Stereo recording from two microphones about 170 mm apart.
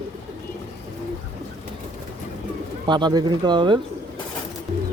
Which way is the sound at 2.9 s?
25° right (ahead or behind).